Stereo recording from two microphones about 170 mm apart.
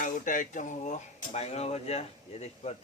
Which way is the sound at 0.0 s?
50° left (ahead or behind).